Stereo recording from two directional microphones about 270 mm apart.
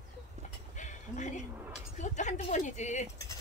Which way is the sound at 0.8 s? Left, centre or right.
Left.